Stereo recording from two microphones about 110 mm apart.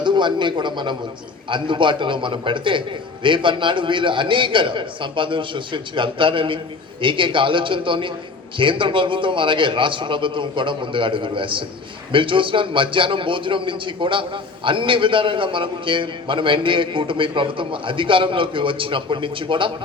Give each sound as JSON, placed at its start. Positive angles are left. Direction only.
{"t": 0.0, "sound": "a man's voice", "side_deg": -45}